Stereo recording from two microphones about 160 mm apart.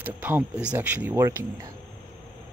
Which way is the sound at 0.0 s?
10° right (ahead or behind).